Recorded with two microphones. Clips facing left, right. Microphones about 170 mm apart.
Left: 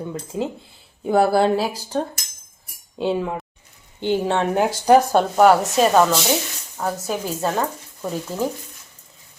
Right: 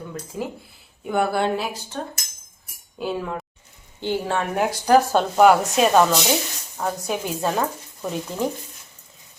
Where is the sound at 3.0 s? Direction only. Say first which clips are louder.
Left 4 dB; 25° left (ahead or behind).